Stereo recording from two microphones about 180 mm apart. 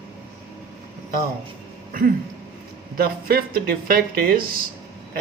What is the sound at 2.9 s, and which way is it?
Speech, 55° right (ahead or behind).